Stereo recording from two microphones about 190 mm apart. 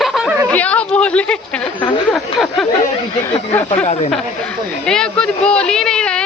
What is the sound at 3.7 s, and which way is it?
Speech, 35° left (ahead or behind).